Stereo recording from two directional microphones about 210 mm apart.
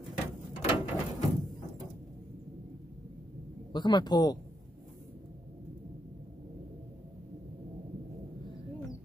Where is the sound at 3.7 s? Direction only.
20° left (ahead or behind).